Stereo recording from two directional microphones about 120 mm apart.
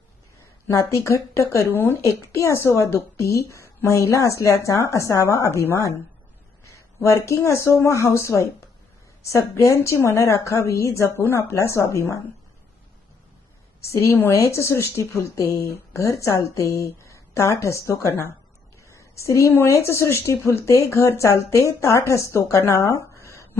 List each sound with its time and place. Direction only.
0.7 s a woman's voice: 25° left (ahead or behind)
7.0 s a woman's voice: 25° left (ahead or behind)
13.8 s a woman's voice: 20° left (ahead or behind)